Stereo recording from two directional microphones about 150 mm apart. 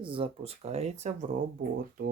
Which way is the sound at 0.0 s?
35° right (ahead or behind).